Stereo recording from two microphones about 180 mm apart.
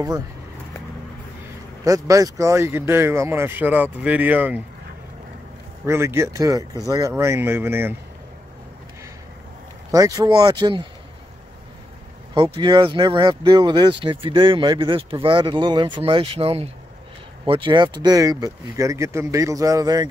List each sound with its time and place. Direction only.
1.9 s speech: 15° right (ahead or behind)
5.9 s speech: 15° right (ahead or behind)
9.8 s speech: 20° right (ahead or behind)
12.5 s speech: 25° right (ahead or behind)